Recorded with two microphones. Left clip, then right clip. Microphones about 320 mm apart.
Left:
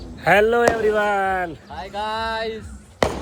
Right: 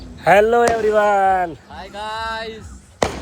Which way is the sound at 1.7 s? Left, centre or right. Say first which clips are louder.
Left 2 dB; centre.